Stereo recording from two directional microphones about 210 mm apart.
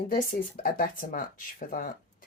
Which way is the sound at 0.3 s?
40° left (ahead or behind).